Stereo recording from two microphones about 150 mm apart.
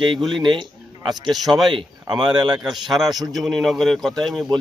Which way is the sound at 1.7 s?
30° right (ahead or behind).